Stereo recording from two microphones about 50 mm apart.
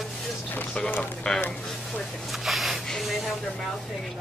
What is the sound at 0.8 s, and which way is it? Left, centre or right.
Speech, left.